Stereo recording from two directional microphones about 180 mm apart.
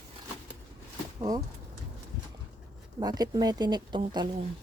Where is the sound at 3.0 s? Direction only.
20° right (ahead or behind).